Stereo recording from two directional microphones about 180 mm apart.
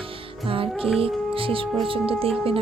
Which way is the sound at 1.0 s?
30° right (ahead or behind).